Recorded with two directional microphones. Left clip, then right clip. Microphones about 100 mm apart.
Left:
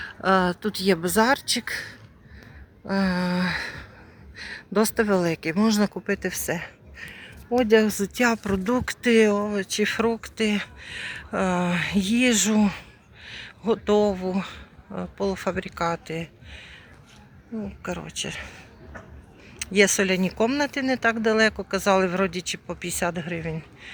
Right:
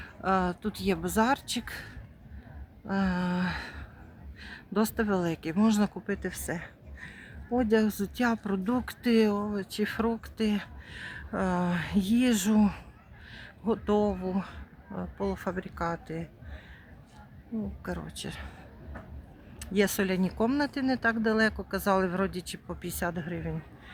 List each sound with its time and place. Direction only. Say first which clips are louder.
0.0 s speech: left 7 dB; 55° left (ahead or behind); by 8.4 s 25° left (ahead or behind)
8.4 s speech: left 7 dB; 10° left (ahead or behind); by 16.6 s 30° left (ahead or behind)
17.6 s speech: left 6 dB; 15° left (ahead or behind)
19.7 s speech: left 8 dB; 15° left (ahead or behind)